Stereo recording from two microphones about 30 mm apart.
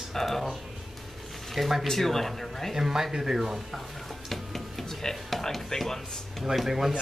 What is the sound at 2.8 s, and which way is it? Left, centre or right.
Speech, centre.